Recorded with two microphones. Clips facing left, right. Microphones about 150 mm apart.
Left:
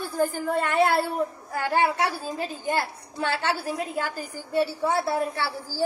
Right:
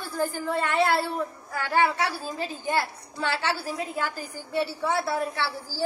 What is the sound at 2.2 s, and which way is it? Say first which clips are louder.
A child's voice: left 1 dB; 50° left (ahead or behind).